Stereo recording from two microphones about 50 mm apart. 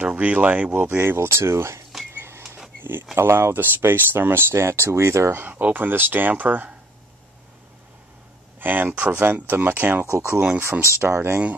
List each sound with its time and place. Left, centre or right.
0.0 s speech: right
0.8 s speech: right
2.1 s a sound: right
2.8 s speech: right
3.2 s speech: right
3.5 s speech: right
5.4 s speech: right
8.5 s speech: right
10.1 s speech: right